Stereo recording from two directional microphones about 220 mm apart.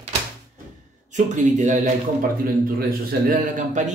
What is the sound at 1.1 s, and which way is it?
Speech, 35° right (ahead or behind).